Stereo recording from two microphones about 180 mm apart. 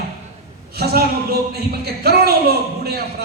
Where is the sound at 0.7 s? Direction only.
60° right (ahead or behind).